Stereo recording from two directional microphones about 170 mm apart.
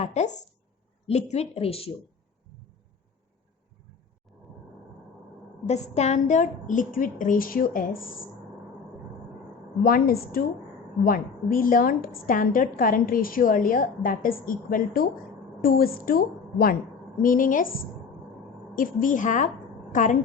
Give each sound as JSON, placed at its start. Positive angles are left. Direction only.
{"t": 0.0, "sound": "a woman's voice", "side_deg": 40}
{"t": 5.6, "sound": "a woman's voice", "side_deg": 40}
{"t": 9.8, "sound": "a woman's voice", "side_deg": 60}
{"t": 18.8, "sound": "a woman's voice", "side_deg": 50}